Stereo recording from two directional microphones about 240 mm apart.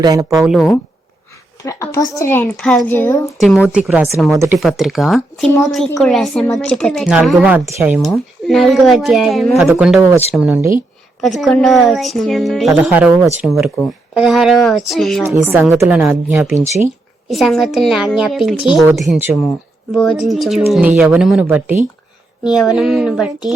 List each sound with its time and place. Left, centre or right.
0.0 s a woman's voice: centre
0.4 s speech: centre
1.6 s a woman's voice: centre
3.4 s a woman's voice: centre
15.3 s a woman's voice: centre